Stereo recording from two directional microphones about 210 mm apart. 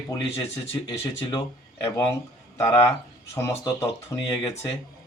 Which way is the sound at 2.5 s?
15° left (ahead or behind).